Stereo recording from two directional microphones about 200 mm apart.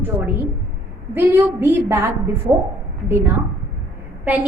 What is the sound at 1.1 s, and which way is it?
A woman's voice, 10° right (ahead or behind).